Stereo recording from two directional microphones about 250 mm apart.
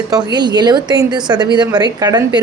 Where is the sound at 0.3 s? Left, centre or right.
Centre.